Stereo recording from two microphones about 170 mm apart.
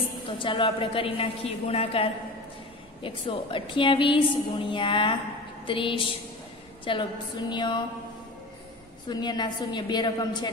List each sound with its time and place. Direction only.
0.3 s a woman's voice: 30° left (ahead or behind)
9.1 s a woman's voice: 25° left (ahead or behind)